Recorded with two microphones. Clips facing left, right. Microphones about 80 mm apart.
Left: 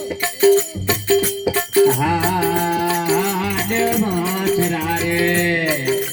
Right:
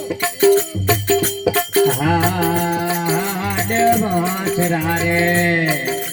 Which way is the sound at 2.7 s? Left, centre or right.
Right.